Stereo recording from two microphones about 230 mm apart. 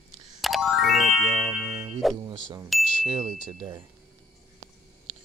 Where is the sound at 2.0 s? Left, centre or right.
Centre.